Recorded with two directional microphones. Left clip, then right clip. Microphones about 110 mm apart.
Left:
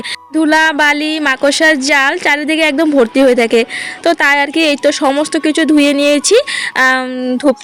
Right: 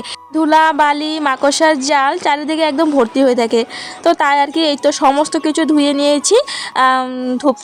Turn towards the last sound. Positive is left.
turn(degrees=30)  # may be behind; listen again after turning